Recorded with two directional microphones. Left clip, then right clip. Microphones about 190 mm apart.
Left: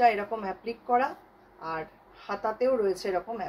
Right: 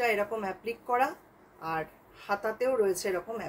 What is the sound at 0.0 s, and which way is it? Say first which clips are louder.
Speech: left 4 dB; 20° right (ahead or behind).